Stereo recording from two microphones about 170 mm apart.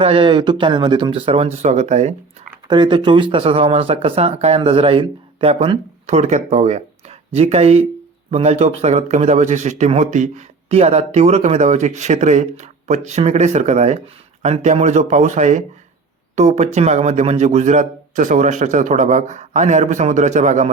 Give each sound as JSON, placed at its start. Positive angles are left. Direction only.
{"t": 0.0, "sound": "speech", "side_deg": -30}
{"t": 2.6, "sound": "speech", "side_deg": -25}
{"t": 6.1, "sound": "speech", "side_deg": -40}